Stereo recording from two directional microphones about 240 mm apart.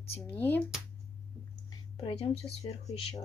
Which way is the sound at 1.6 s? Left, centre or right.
Left.